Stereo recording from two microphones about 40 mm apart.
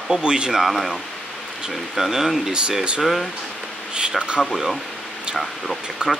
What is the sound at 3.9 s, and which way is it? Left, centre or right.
Speech, right.